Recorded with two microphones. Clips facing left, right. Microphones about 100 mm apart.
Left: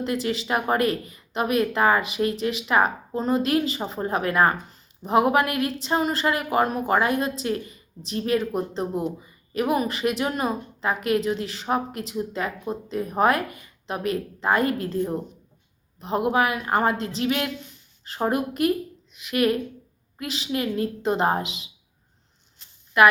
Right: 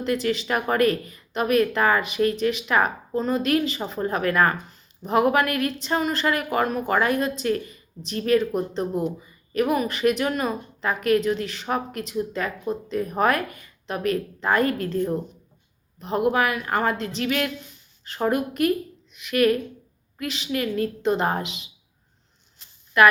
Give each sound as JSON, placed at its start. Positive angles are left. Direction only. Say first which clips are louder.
{"t": 0.0, "sound": "a woman's voice", "louder": "right 2 dB", "side_deg": 25}